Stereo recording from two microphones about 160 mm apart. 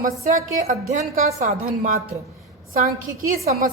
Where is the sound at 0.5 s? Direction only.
45° right (ahead or behind).